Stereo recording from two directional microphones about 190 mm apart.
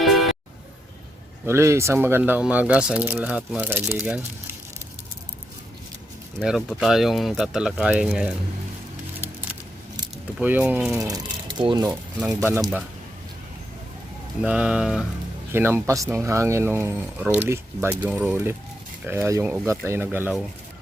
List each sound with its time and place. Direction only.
0.0 s music: centre (ahead or behind)
1.5 s speech: 15° right (ahead or behind)
6.4 s speech: 5° right (ahead or behind)
10.3 s speech: 10° right (ahead or behind)
11.1 s speech: 25° right (ahead or behind)
11.8 s speech: 10° right (ahead or behind)
14.4 s speech: 5° right (ahead or behind)